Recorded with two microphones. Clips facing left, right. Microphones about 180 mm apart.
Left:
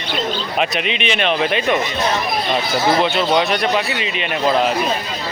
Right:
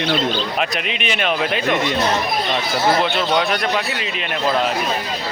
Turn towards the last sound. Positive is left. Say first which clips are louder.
# left 3 dB
turn(degrees=0)  # may be behind; listen again after turning